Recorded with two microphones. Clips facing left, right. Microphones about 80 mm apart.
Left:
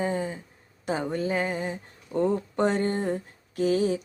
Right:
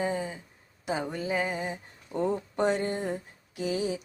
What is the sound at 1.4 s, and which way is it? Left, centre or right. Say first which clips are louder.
Speech: left 2 dB; centre.